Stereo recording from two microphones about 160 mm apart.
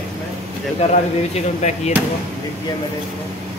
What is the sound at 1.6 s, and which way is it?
Speech, 45° left (ahead or behind).